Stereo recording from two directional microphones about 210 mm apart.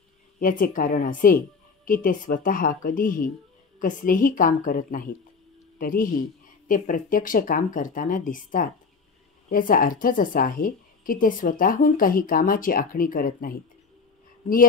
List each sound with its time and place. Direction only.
0.4 s a woman's voice: 40° left (ahead or behind)